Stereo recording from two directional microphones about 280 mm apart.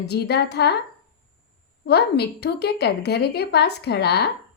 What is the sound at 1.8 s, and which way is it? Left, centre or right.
Speech, left.